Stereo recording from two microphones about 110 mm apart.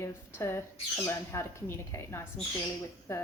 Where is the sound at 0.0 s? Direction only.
25° left (ahead or behind).